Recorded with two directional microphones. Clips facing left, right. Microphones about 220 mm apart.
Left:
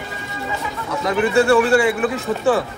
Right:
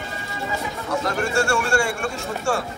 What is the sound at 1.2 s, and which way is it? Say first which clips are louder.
A man's voice: left 11 dB; 5° left (ahead or behind).